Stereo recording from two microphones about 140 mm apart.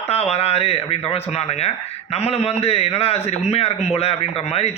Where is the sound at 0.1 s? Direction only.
50° left (ahead or behind).